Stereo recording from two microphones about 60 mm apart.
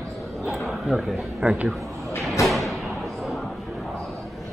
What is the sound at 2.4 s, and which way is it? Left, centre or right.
Thump, centre.